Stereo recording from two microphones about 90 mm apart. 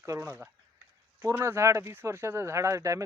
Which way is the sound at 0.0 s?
30° right (ahead or behind).